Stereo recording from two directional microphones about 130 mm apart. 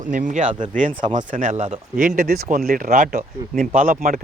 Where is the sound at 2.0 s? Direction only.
90° right.